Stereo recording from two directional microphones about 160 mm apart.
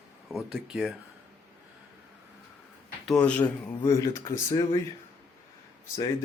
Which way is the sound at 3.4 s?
20° left (ahead or behind).